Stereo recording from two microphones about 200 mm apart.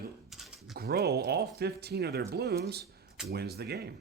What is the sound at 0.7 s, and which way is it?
Speech, 50° right (ahead or behind).